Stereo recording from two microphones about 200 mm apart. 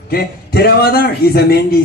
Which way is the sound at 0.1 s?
50° left (ahead or behind).